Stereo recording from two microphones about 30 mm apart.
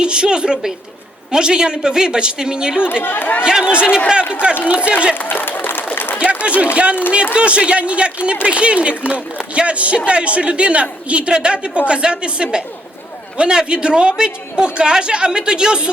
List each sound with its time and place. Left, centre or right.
0.0 s a man's voice: right
5.1 s a sound: left
6.1 s a man's voice: right
11.3 s a man's voice: right